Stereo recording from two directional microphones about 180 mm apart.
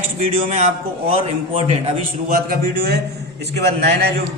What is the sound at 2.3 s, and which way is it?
A man's voice, 50° right (ahead or behind).